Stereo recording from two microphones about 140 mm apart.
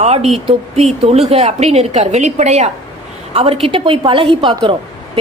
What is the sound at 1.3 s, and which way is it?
A woman's voice, 50° right (ahead or behind).